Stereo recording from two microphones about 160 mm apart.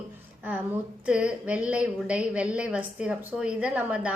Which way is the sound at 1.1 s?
5° right (ahead or behind).